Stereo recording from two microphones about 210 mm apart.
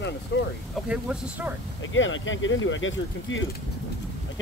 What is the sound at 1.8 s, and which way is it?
Speech, 65° left (ahead or behind).